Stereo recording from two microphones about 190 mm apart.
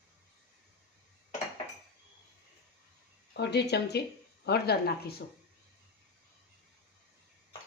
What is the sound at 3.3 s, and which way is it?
A woman's voice, 60° left (ahead or behind).